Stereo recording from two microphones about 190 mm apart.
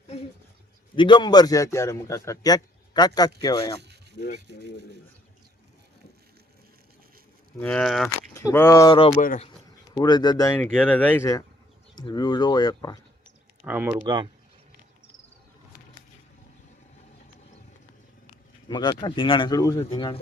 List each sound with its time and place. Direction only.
0.9 s a man's voice: 25° left (ahead or behind)
7.6 s speech: 5° left (ahead or behind)
8.0 s speech: 15° left (ahead or behind)
9.1 s speech: 45° left (ahead or behind)
9.9 s a man's voice: 20° left (ahead or behind)
13.7 s speech: 10° right (ahead or behind)
18.7 s a man's voice: 25° left (ahead or behind)